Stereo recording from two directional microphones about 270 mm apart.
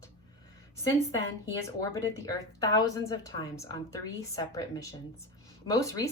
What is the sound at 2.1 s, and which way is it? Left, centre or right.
A woman's voice, centre.